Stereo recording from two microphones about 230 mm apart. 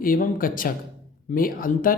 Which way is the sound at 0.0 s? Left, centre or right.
Left.